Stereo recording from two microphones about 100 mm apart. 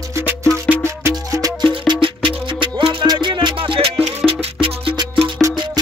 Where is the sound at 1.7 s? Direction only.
60° right (ahead or behind).